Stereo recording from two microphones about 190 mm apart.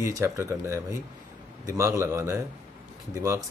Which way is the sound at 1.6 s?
15° right (ahead or behind).